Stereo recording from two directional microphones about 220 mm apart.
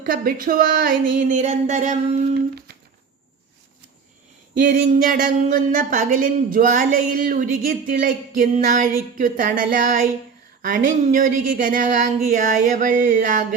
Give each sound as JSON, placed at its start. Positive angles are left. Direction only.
{"t": 0.0, "sound": "speech", "side_deg": -40}
{"t": 4.6, "sound": "speech", "side_deg": -40}